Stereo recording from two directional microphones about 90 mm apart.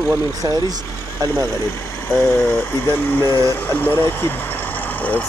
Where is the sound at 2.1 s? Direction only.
25° left (ahead or behind).